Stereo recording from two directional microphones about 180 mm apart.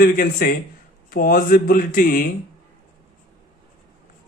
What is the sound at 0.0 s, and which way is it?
Speech, 55° left (ahead or behind).